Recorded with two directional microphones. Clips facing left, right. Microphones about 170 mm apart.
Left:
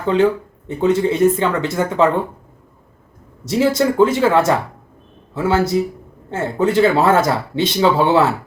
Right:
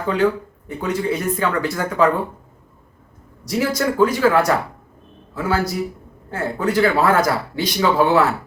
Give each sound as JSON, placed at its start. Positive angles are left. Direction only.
{"t": 0.7, "sound": "speech", "side_deg": 25}
{"t": 3.4, "sound": "speech", "side_deg": 25}